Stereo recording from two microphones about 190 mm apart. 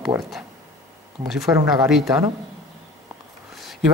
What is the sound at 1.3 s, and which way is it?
Speech, centre (ahead or behind).